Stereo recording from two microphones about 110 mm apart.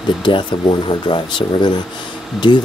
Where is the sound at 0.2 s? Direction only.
45° left (ahead or behind).